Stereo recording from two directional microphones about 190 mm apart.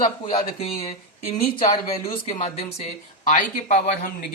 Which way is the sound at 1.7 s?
30° left (ahead or behind).